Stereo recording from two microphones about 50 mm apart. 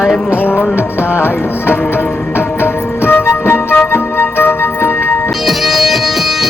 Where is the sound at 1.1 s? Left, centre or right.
Left.